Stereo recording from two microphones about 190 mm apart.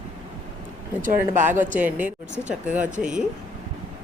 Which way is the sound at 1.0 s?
45° right (ahead or behind).